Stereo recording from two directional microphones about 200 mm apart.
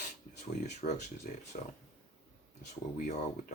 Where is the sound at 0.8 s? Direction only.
35° left (ahead or behind).